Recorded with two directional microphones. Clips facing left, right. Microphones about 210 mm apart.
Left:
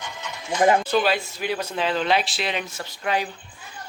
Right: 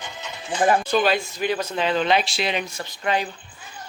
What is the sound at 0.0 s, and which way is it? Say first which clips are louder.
Music: even; 20° right (ahead or behind).